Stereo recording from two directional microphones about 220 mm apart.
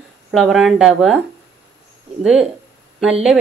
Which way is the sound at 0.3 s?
Centre (ahead or behind).